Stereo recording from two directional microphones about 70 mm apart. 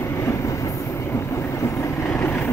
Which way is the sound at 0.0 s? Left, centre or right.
Left.